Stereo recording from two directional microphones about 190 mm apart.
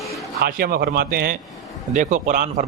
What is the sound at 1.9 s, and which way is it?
Speech, 40° right (ahead or behind).